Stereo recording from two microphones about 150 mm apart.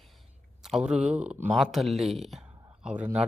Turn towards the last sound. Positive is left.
turn(degrees=-10)  # may be behind; listen again after turning